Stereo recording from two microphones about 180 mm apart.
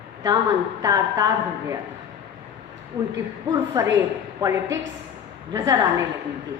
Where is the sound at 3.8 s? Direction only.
20° right (ahead or behind).